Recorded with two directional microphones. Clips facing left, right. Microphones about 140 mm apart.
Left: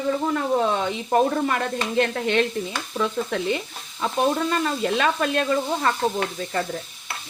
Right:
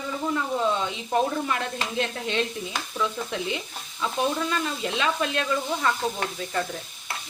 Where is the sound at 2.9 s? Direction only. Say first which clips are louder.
Left 5 dB; 45° left (ahead or behind).